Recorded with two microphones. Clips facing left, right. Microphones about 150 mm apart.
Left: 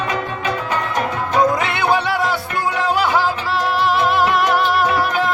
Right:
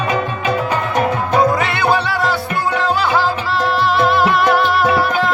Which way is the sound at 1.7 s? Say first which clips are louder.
Right 1 dB; 15° left (ahead or behind).